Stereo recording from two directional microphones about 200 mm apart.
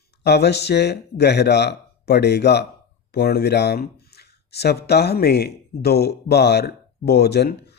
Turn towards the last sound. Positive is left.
turn(degrees=55)  # may be behind; listen again after turning